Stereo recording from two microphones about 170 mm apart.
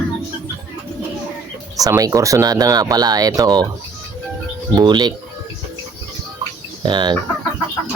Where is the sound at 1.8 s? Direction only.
20° right (ahead or behind).